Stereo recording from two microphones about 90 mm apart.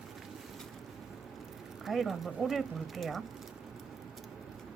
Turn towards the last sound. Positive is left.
turn(degrees=0)  # may be behind; listen again after turning